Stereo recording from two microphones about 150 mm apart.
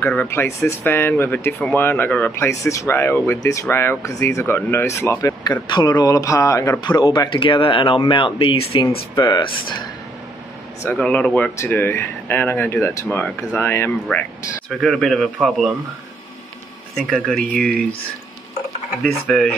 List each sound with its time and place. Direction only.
0.0 s speech: 10° left (ahead or behind); by 9.7 s 30° left (ahead or behind)
11.0 s speech: 5° left (ahead or behind)
14.7 s speech: centre (ahead or behind)
16.9 s speech: centre (ahead or behind)
19.2 s speech: 5° left (ahead or behind)